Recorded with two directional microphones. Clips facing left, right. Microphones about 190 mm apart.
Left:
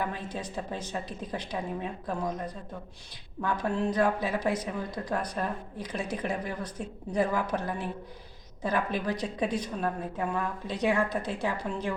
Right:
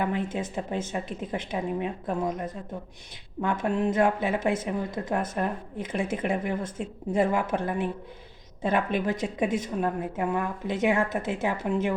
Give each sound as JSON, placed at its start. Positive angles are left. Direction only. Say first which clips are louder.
{"t": 0.0, "sound": "speech", "louder": "right 6 dB", "side_deg": -20}
{"t": 3.4, "sound": "speech", "louder": "right 3 dB", "side_deg": -25}
{"t": 8.6, "sound": "speech", "louder": "right 4 dB", "side_deg": -25}